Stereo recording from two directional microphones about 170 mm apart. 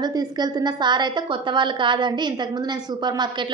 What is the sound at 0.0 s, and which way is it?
A woman's voice, 25° right (ahead or behind).